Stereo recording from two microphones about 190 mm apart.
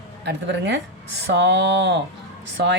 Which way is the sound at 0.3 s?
70° right (ahead or behind).